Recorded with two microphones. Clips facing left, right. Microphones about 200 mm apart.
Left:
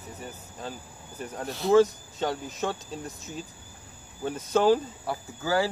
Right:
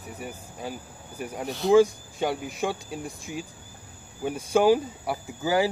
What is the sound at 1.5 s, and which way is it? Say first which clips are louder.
Speech: right 2 dB; centre (ahead or behind).